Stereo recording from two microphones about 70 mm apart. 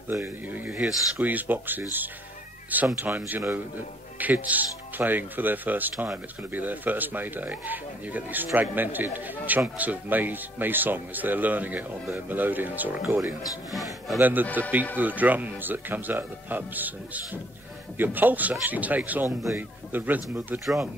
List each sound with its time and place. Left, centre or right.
0.1 s speech: right
0.7 s speech: centre
1.2 s speech: right
13.7 s a man's voice: centre
14.2 s speech: right
20.6 s a man's voice: centre